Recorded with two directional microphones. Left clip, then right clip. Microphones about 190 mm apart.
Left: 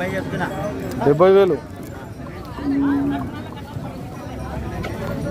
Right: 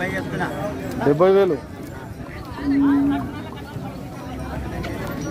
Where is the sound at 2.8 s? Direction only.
55° right (ahead or behind).